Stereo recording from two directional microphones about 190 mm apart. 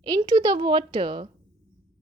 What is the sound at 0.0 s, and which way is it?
A woman's voice, 20° right (ahead or behind).